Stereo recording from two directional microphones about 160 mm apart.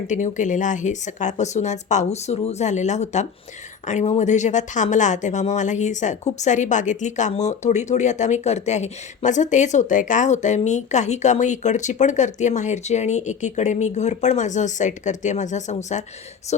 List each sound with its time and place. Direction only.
0.1 s speech: 50° left (ahead or behind)